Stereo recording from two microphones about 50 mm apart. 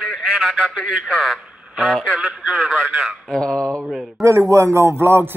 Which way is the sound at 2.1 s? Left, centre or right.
Right.